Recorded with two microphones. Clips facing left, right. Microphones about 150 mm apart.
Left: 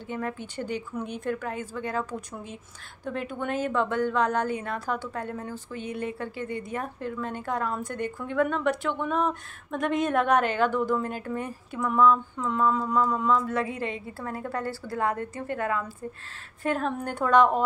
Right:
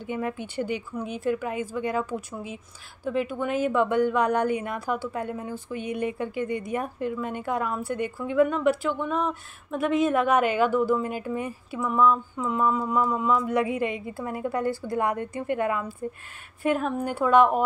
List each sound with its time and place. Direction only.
0.0 s a woman's voice: 15° right (ahead or behind)